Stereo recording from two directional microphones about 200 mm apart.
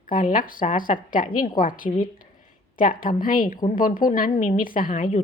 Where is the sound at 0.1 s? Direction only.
45° left (ahead or behind).